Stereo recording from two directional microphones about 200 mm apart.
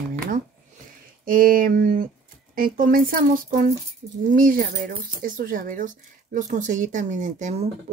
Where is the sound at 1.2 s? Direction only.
45° right (ahead or behind).